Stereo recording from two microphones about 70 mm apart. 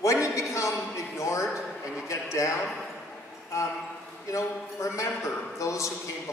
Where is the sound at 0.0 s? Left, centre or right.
Left.